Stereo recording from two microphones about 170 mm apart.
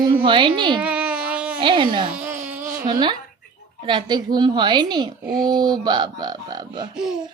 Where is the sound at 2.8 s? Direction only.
25° right (ahead or behind).